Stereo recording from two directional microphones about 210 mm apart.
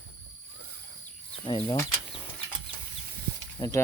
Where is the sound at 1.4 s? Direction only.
25° left (ahead or behind).